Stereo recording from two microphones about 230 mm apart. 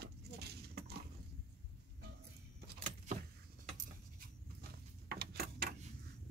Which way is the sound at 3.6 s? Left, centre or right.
Right.